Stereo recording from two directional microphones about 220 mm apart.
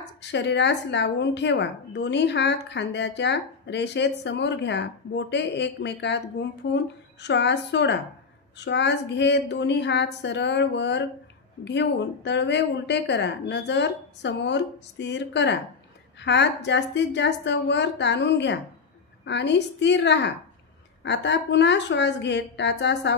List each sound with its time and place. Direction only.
0.2 s a woman's voice: 50° left (ahead or behind)